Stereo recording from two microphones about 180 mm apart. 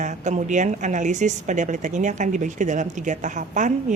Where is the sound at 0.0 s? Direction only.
40° right (ahead or behind).